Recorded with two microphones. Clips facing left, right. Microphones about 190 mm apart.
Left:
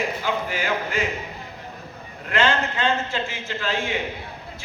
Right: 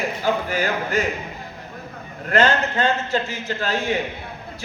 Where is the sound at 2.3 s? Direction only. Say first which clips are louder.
Right 3 dB; 40° right (ahead or behind).